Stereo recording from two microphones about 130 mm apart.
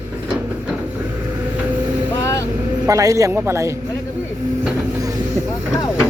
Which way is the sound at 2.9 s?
25° right (ahead or behind).